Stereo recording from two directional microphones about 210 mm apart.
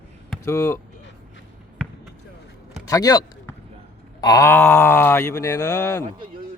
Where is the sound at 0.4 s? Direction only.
15° left (ahead or behind).